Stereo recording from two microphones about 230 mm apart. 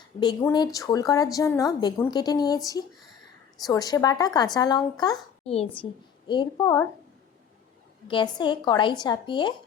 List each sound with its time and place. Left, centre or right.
0.2 s a woman's voice: centre
8.0 s a woman's voice: left